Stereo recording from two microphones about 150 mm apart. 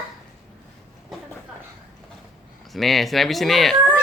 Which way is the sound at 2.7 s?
Centre (ahead or behind).